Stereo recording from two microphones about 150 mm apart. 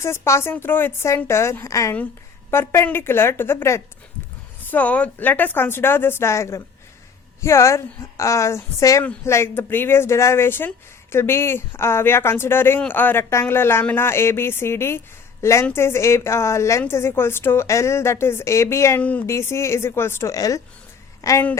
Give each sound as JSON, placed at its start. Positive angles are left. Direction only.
{"t": 0.0, "sound": "a woman's voice", "side_deg": 20}